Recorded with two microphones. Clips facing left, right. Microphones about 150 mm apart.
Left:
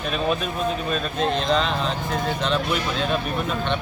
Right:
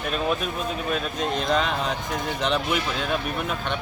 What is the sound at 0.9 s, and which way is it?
Speech, 10° right (ahead or behind).